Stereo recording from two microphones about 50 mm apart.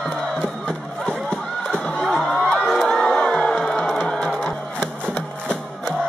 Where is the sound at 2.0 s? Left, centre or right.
Centre.